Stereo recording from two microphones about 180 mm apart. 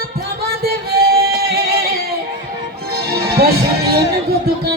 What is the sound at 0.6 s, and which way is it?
Music, 60° right (ahead or behind).